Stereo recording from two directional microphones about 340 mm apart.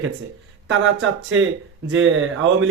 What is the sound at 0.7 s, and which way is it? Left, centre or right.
Speech, right.